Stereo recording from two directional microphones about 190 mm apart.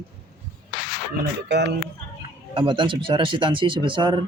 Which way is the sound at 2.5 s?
25° right (ahead or behind).